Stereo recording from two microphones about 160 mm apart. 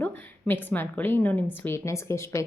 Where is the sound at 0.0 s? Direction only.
10° left (ahead or behind).